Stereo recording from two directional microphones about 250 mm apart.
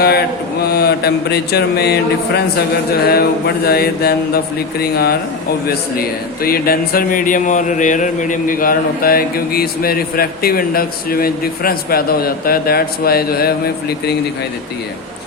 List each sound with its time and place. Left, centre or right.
0.7 s speech: left